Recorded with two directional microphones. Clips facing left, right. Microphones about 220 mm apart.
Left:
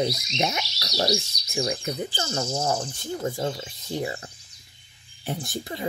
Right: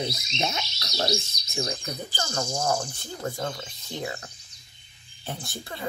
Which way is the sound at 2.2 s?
15° right (ahead or behind).